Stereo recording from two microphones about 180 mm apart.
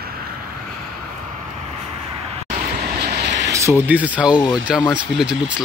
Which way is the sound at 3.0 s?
70° right (ahead or behind).